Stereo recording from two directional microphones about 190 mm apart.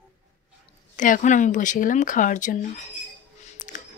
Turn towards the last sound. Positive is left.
turn(degrees=40)  # may be behind; listen again after turning